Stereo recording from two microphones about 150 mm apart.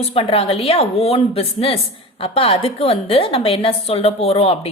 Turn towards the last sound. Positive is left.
turn(degrees=40)  # may be behind; listen again after turning